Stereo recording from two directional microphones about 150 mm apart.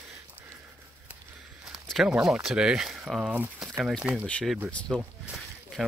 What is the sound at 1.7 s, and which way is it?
Speech, centre (ahead or behind).